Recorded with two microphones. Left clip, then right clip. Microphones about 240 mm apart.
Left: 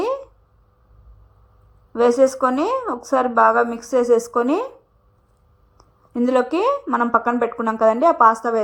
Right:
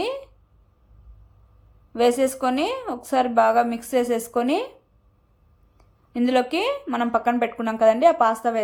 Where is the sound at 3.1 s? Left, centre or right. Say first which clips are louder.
Left 3 dB; left.